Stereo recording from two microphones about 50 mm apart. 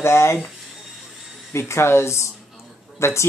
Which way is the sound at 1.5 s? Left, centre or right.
Left.